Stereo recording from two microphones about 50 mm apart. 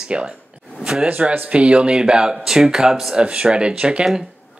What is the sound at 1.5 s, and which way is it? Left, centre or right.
Speech, right.